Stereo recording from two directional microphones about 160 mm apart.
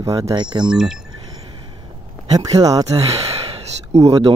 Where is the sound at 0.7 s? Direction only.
5° right (ahead or behind).